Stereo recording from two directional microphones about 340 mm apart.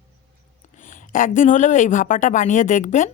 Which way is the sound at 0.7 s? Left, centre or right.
Left.